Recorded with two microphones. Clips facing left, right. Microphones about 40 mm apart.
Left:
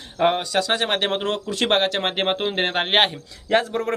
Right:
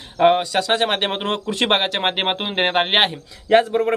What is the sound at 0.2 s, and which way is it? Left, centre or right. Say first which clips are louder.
Speech: right 4 dB; centre.